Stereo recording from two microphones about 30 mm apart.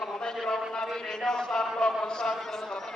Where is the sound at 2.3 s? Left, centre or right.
Centre.